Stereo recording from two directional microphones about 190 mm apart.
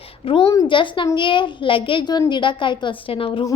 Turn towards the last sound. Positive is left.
turn(degrees=25)  # may be behind; listen again after turning